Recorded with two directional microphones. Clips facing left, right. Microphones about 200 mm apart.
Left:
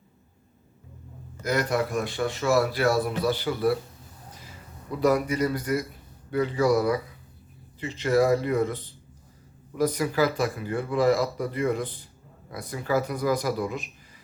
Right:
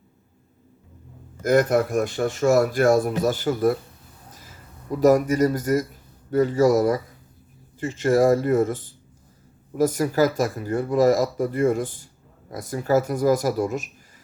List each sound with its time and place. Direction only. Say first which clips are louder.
1.4 s speech: right 7 dB; 50° right (ahead or behind)